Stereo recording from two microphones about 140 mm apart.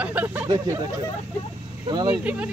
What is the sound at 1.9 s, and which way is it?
Speech, 35° right (ahead or behind).